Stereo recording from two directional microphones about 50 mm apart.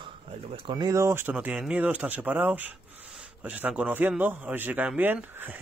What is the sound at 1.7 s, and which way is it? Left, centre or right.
Speech, right.